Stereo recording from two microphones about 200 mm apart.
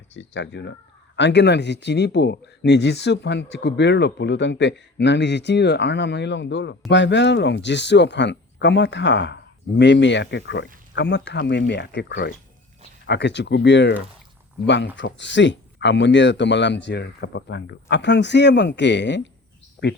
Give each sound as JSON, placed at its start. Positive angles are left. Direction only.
{"t": 0.1, "sound": "speech", "side_deg": 65}
{"t": 14.9, "sound": "speech", "side_deg": 60}